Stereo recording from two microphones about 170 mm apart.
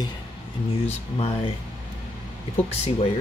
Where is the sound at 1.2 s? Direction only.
35° left (ahead or behind).